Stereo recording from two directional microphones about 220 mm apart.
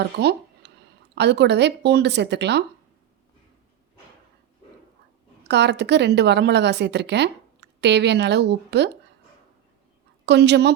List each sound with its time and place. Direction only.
0.0 s a woman's voice: 50° right (ahead or behind)
5.5 s a woman's voice: 50° right (ahead or behind)
10.2 s a woman's voice: 50° right (ahead or behind)